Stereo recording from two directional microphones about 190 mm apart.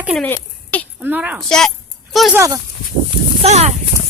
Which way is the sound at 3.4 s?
35° right (ahead or behind).